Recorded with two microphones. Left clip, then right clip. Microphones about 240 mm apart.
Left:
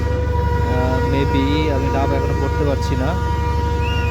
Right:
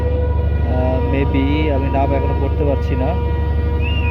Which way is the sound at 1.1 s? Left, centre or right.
Centre.